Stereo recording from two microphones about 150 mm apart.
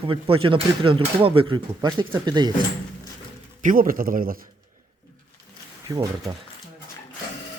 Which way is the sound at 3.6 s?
70° right (ahead or behind).